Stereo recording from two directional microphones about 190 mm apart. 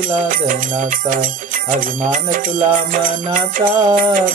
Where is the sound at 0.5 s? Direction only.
45° right (ahead or behind).